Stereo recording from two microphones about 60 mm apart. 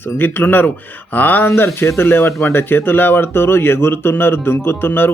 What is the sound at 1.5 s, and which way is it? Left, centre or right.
Speech, left.